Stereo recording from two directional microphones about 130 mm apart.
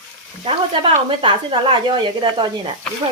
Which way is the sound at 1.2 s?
40° right (ahead or behind).